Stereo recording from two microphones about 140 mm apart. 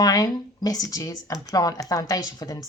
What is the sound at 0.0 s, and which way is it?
Speech, 25° left (ahead or behind).